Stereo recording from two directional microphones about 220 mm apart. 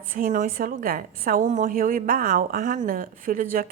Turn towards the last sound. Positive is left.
turn(degrees=-40)  # may be behind; listen again after turning